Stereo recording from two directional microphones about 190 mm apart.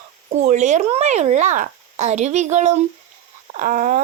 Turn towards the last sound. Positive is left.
turn(degrees=-45)  # may be behind; listen again after turning